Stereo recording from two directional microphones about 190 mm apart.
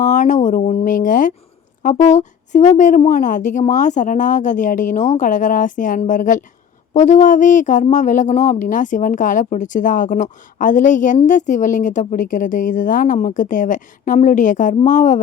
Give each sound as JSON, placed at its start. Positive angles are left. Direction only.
{"t": 0.0, "sound": "a woman's voice", "side_deg": 40}